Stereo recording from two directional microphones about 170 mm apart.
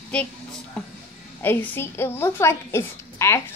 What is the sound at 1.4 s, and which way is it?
A woman's voice, 10° left (ahead or behind).